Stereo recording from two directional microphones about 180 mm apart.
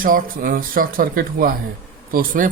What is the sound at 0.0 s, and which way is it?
Speech, 50° right (ahead or behind).